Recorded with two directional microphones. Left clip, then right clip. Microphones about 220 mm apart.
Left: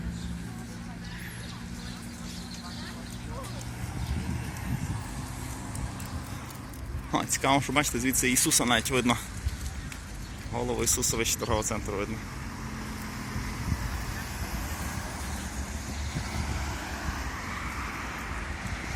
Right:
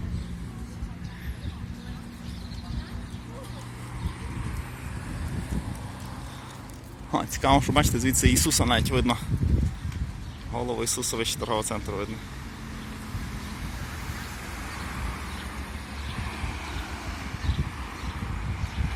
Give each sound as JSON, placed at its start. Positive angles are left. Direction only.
{"t": 7.1, "sound": "speech", "side_deg": -15}
{"t": 10.5, "sound": "speech", "side_deg": -10}